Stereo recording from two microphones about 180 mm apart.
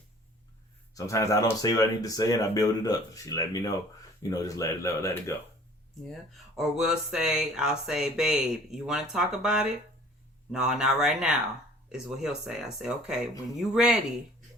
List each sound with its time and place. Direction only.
0.9 s speech: 15° left (ahead or behind)
6.6 s speech: centre (ahead or behind)